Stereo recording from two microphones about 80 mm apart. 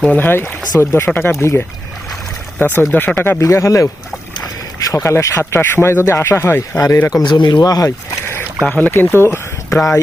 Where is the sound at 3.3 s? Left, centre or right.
Left.